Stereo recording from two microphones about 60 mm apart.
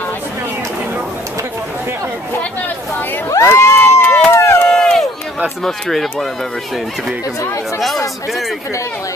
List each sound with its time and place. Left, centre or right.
3.3 s crowd: left
4.3 s run: left
4.6 s run: centre
5.6 s speech: centre